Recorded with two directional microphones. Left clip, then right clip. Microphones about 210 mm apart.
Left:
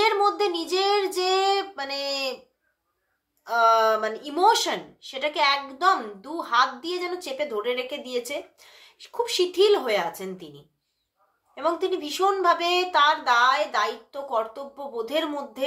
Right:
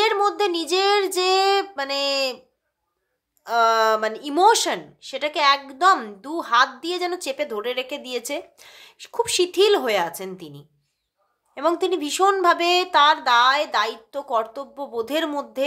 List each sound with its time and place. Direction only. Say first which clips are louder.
0.0 s child singing: right 2 dB; 40° right (ahead or behind)
3.4 s speech: right 1 dB; 45° right (ahead or behind)